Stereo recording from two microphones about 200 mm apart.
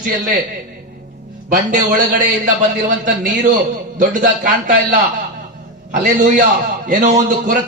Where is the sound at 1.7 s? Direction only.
40° right (ahead or behind).